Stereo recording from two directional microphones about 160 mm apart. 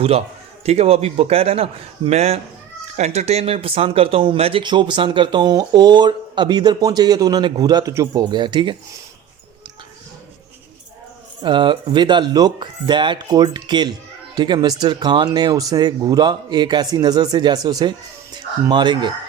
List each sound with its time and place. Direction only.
0.6 s a man's voice: 40° right (ahead or behind)
11.4 s speech: 30° right (ahead or behind)